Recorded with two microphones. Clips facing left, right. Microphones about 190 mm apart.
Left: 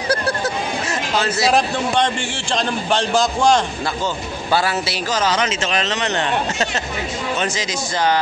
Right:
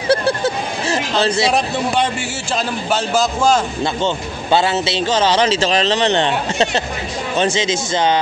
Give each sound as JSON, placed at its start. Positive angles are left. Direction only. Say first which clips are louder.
{"t": 0.1, "sound": "a sound", "louder": "right 5 dB", "side_deg": -25}
{"t": 2.5, "sound": "a man's voice", "louder": "even", "side_deg": -5}
{"t": 3.8, "sound": "speech", "louder": "right 4 dB", "side_deg": -25}